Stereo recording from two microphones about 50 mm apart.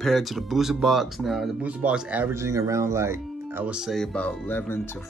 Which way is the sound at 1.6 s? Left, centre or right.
Right.